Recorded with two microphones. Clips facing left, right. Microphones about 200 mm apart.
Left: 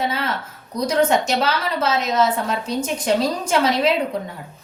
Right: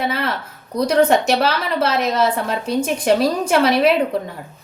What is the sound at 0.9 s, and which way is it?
A woman's voice, 60° right (ahead or behind).